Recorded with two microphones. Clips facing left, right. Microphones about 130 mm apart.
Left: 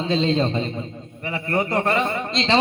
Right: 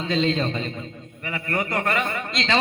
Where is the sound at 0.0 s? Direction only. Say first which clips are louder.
Left 2 dB; 30° left (ahead or behind).